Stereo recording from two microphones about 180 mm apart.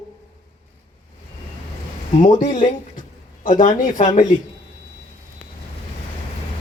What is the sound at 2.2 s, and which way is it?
Speech, 45° left (ahead or behind).